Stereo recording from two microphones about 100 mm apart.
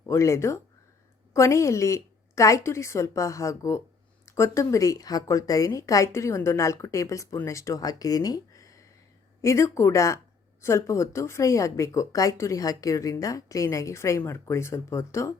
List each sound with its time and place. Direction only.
0.0 s speech: 30° left (ahead or behind)